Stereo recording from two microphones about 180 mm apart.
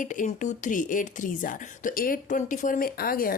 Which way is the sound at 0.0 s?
45° left (ahead or behind).